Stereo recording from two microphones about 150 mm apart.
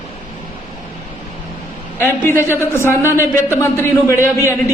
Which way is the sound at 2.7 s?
15° left (ahead or behind).